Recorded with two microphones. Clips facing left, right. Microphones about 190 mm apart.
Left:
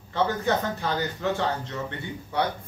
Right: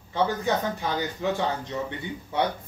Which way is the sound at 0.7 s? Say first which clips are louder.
Even; 15° right (ahead or behind).